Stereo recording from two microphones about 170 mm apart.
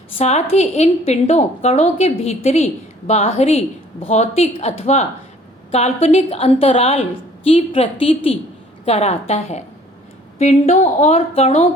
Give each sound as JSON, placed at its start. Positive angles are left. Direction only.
{"t": 0.2, "sound": "a woman's voice", "side_deg": 40}